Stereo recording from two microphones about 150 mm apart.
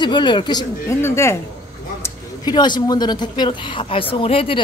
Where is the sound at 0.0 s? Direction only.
30° left (ahead or behind).